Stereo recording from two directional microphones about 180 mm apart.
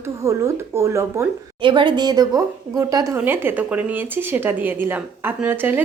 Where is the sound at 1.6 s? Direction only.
25° right (ahead or behind); by 5.8 s 10° right (ahead or behind).